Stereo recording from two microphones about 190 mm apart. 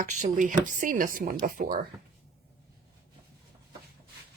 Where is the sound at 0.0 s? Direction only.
40° right (ahead or behind).